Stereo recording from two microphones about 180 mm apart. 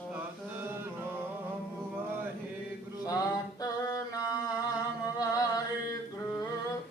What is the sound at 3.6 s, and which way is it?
Singing, 20° left (ahead or behind).